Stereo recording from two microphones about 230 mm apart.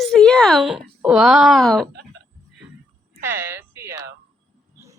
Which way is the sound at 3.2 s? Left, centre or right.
Centre.